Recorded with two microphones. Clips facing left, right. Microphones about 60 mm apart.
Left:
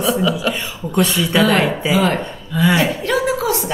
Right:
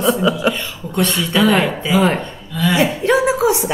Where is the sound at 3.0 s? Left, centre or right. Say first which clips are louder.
Right 4 dB; right.